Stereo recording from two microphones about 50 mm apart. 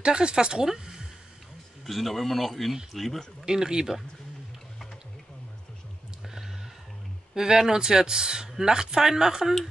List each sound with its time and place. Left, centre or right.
0.0 s speech: centre
1.9 s speech: centre
3.4 s speech: centre
6.2 s a sound: centre
7.3 s speech: centre